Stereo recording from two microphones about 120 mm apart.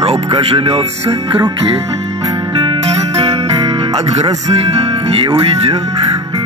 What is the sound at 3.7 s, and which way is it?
Music, 65° right (ahead or behind).